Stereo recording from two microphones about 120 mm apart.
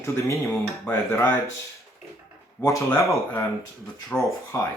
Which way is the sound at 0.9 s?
20° left (ahead or behind).